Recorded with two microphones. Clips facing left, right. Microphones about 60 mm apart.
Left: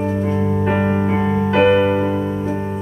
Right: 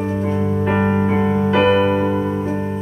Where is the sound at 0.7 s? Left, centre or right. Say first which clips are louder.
Right 1 dB; centre.